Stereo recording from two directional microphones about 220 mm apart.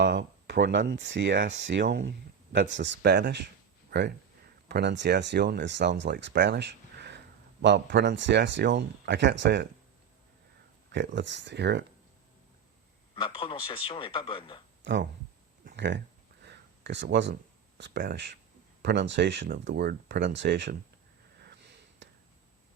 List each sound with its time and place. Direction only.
0.0 s speech: 55° right (ahead or behind)
4.7 s speech: 50° right (ahead or behind)
10.9 s speech: 55° right (ahead or behind)
13.1 s a man's voice: 25° left (ahead or behind)
14.8 s speech: 55° right (ahead or behind)
16.4 s a sound: 50° right (ahead or behind)
17.7 s speech: 55° right (ahead or behind)
21.4 s sniff: 50° right (ahead or behind)